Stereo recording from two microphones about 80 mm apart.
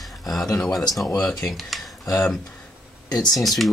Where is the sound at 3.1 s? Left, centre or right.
Left.